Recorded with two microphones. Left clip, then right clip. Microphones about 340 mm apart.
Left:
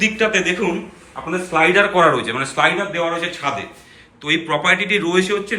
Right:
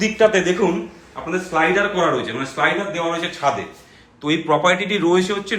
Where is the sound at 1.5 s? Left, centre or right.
Centre.